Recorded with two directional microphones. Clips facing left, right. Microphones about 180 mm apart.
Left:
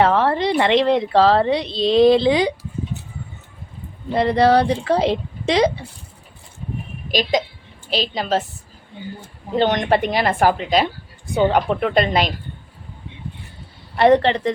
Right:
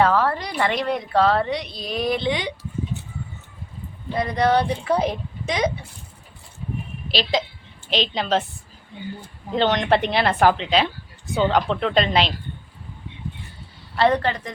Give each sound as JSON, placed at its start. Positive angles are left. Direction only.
{"t": 0.0, "sound": "a woman's voice", "side_deg": 25}
{"t": 4.4, "sound": "speech", "side_deg": 30}
{"t": 4.7, "sound": "a woman's voice", "side_deg": 90}
{"t": 7.2, "sound": "a woman's voice", "side_deg": 15}
{"t": 7.9, "sound": "a woman's voice", "side_deg": 40}
{"t": 8.1, "sound": "a woman's voice", "side_deg": 5}
{"t": 9.6, "sound": "a woman's voice", "side_deg": 15}
{"t": 13.9, "sound": "a woman's voice", "side_deg": 20}